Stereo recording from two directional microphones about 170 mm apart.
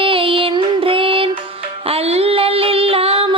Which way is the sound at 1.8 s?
35° right (ahead or behind).